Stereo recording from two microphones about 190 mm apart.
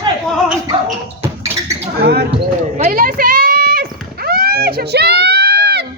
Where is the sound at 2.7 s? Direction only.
45° right (ahead or behind).